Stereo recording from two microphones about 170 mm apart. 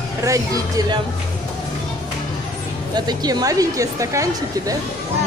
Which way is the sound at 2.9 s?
25° right (ahead or behind).